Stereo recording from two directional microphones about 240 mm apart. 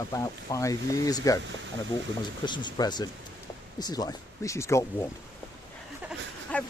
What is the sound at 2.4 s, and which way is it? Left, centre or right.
Speech, centre.